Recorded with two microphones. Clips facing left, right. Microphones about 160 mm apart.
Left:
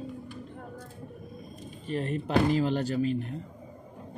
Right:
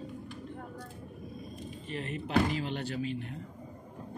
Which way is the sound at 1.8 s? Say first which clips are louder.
Left 7 dB; 40° left (ahead or behind).